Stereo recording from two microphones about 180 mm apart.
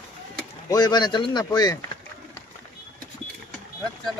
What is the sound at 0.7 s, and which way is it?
Speech, 25° left (ahead or behind).